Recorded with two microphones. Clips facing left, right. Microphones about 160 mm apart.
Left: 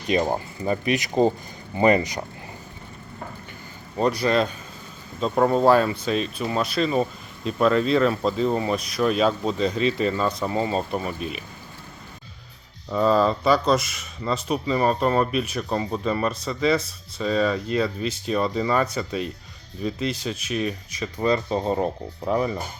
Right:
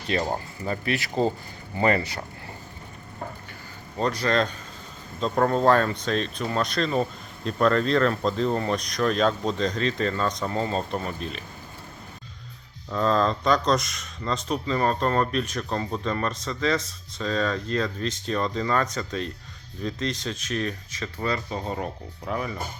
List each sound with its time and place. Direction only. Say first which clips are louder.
0.1 s speech: left 4 dB; 15° left (ahead or behind)
3.9 s speech: left 3 dB; 10° left (ahead or behind)
12.9 s speech: left 3 dB; 10° left (ahead or behind); by 22.5 s 30° left (ahead or behind)